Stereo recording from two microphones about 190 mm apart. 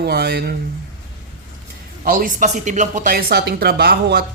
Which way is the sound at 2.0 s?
45° right (ahead or behind).